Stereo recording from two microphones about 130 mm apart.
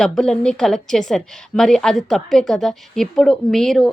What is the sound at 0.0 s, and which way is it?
A woman's voice, 5° left (ahead or behind).